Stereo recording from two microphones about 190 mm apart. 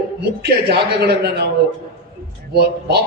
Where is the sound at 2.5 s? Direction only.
55° right (ahead or behind).